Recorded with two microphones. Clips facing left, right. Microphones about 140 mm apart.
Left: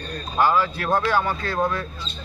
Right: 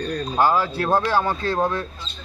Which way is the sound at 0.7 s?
30° right (ahead or behind).